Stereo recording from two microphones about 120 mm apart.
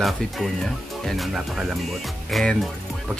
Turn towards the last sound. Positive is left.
turn(degrees=0)  # may be behind; listen again after turning